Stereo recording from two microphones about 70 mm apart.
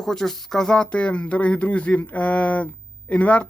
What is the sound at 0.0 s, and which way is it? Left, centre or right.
Speech, centre.